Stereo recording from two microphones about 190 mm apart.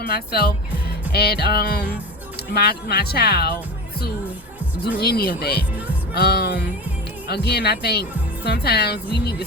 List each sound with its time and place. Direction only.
0.0 s speech: 55° left (ahead or behind)
4.9 s speech: 55° left (ahead or behind)